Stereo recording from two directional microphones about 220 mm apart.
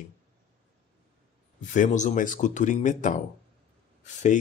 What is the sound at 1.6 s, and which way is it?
Speech, 35° left (ahead or behind).